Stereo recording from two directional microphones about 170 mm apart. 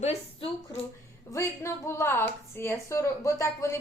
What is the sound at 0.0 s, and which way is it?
Speech, 40° left (ahead or behind).